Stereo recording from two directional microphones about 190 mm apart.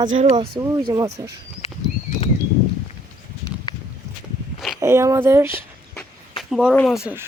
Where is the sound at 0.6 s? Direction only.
15° right (ahead or behind).